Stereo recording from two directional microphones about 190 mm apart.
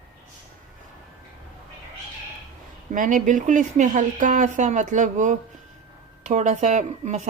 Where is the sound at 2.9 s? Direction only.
45° right (ahead or behind).